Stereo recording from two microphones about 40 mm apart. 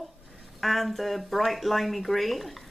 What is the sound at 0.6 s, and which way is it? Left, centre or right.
Speech, centre.